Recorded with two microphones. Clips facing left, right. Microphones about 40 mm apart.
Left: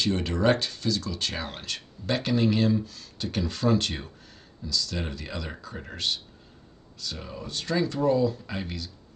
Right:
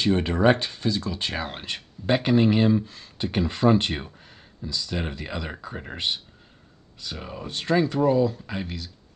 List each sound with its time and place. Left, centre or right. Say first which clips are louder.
0.0 s speech: right 4 dB; right
7.8 s speech: right 1 dB; centre